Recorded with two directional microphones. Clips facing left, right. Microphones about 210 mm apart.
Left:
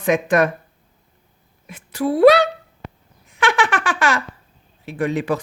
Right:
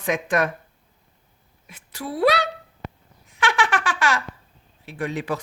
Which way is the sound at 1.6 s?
55° left (ahead or behind).